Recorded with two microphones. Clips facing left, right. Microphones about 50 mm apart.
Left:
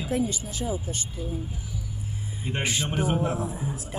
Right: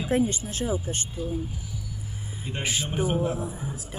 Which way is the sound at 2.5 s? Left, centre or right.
Left.